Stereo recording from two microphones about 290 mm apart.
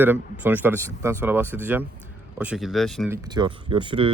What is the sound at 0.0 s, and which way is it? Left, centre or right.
Speech, centre.